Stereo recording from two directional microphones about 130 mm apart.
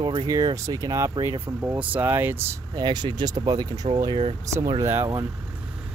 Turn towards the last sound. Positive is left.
turn(degrees=-20)  # may be behind; listen again after turning